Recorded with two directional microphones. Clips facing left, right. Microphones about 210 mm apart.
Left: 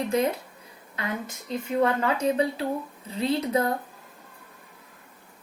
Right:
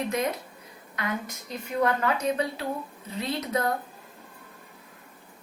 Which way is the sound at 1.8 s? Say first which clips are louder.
Left 1 dB; 25° left (ahead or behind).